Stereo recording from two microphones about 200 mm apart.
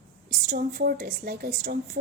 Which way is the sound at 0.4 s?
45° right (ahead or behind).